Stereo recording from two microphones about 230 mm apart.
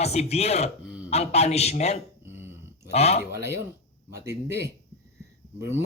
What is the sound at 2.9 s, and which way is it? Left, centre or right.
Speech, left.